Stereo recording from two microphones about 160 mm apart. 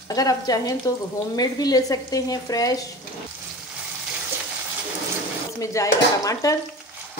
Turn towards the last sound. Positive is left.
turn(degrees=20)  # may be behind; listen again after turning